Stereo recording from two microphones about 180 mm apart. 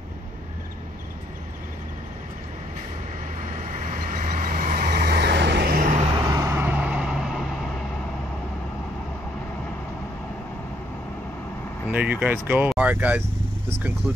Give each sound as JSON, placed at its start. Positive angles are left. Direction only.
{"t": 3.8, "sound": "vehicle", "side_deg": -45}
{"t": 6.1, "sound": "vehicle", "side_deg": -20}
{"t": 11.9, "sound": "speech", "side_deg": -10}